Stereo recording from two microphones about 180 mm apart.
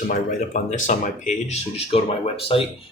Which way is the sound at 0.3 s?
45° left (ahead or behind).